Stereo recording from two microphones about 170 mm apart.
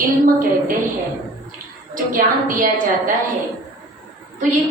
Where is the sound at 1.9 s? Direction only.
55° right (ahead or behind).